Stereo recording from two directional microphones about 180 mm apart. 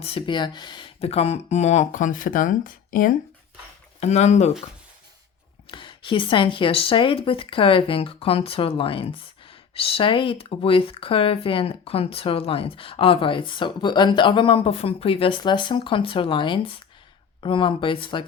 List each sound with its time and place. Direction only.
0.0 s speech: 30° left (ahead or behind); by 3.1 s 50° left (ahead or behind)
4.0 s speech: 40° left (ahead or behind)
5.6 s speech: 25° left (ahead or behind)